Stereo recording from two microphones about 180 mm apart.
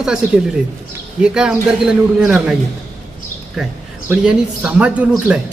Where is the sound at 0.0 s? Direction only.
5° right (ahead or behind).